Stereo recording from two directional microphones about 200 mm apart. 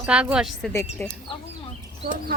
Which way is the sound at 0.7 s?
10° left (ahead or behind).